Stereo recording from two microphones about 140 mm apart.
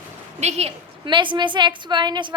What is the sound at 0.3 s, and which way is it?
Speech, 50° right (ahead or behind).